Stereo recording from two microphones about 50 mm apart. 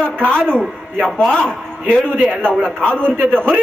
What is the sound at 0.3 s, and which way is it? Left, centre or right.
A man's voice, centre.